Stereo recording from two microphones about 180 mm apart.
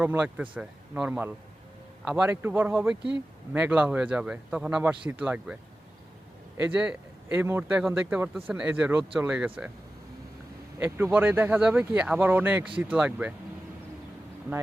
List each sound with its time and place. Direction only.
0.0 s speech: 10° right (ahead or behind)
6.7 s speech: 5° right (ahead or behind)
10.8 s speech: 10° right (ahead or behind)